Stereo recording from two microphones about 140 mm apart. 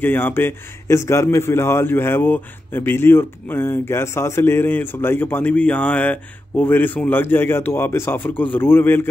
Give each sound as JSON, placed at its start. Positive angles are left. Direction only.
{"t": 0.0, "sound": "a man's voice", "side_deg": 15}